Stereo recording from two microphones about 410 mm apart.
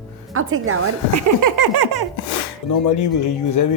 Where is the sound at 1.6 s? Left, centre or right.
Right.